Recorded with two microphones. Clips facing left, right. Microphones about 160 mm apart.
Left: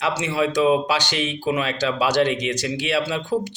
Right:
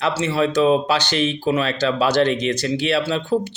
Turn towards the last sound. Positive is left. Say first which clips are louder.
# right 3 dB
turn(degrees=15)  # may be behind; listen again after turning